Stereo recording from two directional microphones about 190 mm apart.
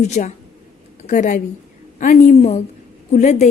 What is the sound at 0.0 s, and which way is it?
A woman's voice, 35° left (ahead or behind).